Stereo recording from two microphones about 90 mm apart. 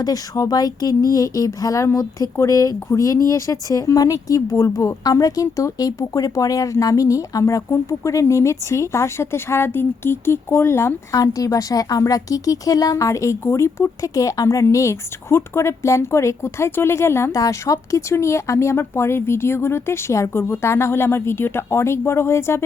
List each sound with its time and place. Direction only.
0.0 s speech: 45° left (ahead or behind); by 17.3 s 30° left (ahead or behind)
17.3 s speech: 40° left (ahead or behind)